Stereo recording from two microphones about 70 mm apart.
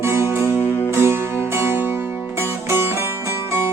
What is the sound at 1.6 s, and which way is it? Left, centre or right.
Music, right.